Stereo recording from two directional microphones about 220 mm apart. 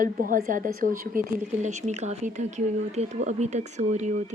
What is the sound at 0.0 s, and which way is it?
A woman's voice, 40° right (ahead or behind).